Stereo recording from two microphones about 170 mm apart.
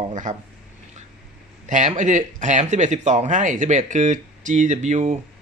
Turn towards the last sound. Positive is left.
turn(degrees=-45)  # may be behind; listen again after turning